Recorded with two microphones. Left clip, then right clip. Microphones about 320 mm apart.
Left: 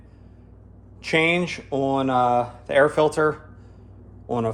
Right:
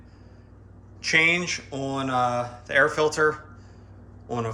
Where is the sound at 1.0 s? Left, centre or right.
Centre.